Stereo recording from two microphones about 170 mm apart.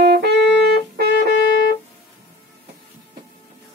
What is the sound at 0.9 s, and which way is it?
Music, 70° right (ahead or behind).